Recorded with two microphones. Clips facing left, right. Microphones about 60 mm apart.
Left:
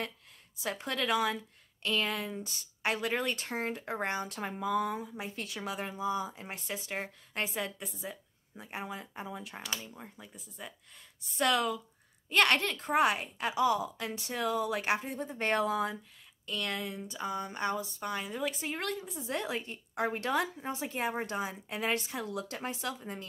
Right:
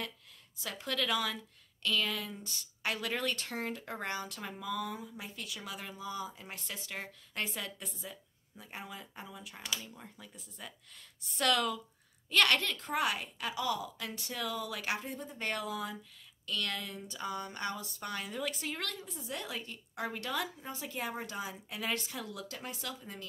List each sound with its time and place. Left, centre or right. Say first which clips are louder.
0.7 s a woman's voice: left 3 dB; left
9.3 s speech: left 1 dB; left
9.8 s speech: left 2 dB; centre
12.3 s a woman's voice: left 2 dB; left
16.4 s a woman's voice: left 2 dB; left